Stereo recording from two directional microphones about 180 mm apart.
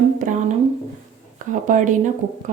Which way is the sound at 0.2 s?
45° right (ahead or behind).